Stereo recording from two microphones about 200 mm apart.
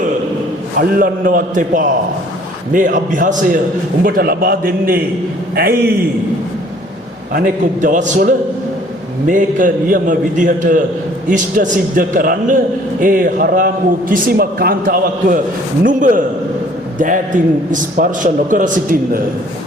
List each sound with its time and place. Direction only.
0.8 s a man's voice: 45° right (ahead or behind)
7.3 s a man's voice: 40° right (ahead or behind)